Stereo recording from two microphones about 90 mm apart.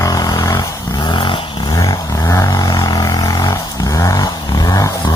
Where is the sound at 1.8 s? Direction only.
35° left (ahead or behind).